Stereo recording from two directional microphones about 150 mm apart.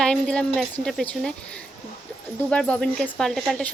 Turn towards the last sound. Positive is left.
turn(degrees=5)  # may be behind; listen again after turning